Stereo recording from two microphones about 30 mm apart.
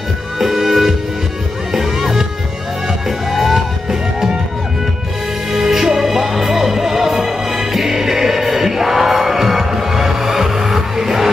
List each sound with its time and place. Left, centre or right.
0.4 s music: centre
5.5 s music: centre